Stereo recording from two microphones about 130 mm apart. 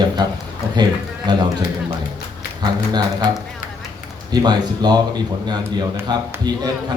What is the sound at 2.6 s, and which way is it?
Speech, 35° right (ahead or behind).